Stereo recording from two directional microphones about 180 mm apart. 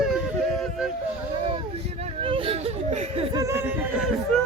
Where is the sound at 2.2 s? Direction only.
30° right (ahead or behind).